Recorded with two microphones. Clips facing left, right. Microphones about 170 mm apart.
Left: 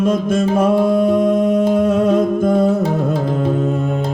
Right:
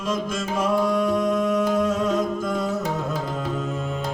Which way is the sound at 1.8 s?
60° left (ahead or behind).